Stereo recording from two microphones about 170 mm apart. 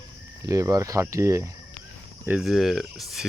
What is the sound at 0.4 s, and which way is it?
Speech, 20° right (ahead or behind).